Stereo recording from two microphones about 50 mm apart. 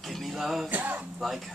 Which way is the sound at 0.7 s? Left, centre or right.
Right.